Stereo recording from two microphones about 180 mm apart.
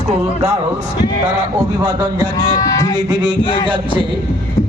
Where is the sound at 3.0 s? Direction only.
25° right (ahead or behind).